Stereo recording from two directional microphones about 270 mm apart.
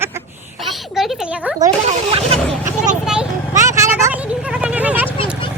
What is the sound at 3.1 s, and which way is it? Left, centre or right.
Vehicle, centre.